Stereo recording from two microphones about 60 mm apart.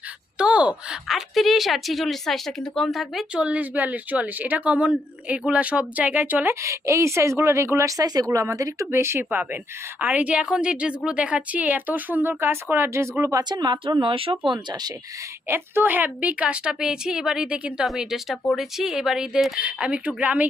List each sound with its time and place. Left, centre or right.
0.3 s a sound: centre
1.0 s a woman's voice: centre
3.4 s a woman's voice: right
6.5 s a woman's voice: right
8.9 s speech: right
9.3 s a woman's voice: right
15.4 s a woman's voice: right